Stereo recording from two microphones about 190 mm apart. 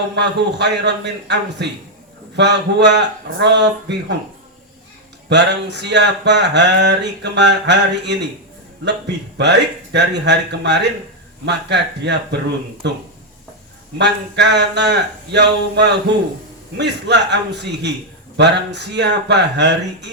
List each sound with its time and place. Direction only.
0.2 s speech: 65° right (ahead or behind)
5.3 s speech: 65° right (ahead or behind)
14.0 s speech: 65° right (ahead or behind)